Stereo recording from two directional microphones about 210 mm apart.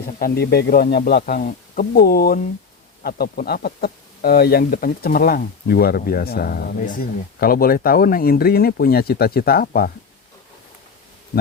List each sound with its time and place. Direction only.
0.2 s speech: 45° left (ahead or behind)